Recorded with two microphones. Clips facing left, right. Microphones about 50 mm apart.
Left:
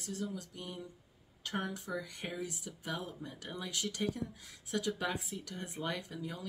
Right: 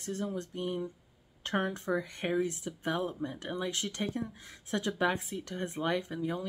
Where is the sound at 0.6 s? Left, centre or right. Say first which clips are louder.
Right 10 dB; right.